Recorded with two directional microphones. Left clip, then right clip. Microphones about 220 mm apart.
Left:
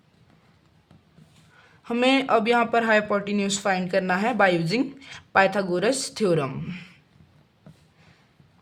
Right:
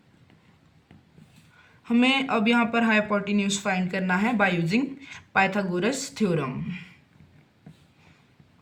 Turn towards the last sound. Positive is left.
turn(degrees=45)  # may be behind; listen again after turning